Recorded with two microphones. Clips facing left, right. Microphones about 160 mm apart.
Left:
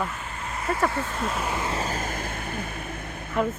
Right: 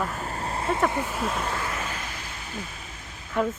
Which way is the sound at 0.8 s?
15° right (ahead or behind).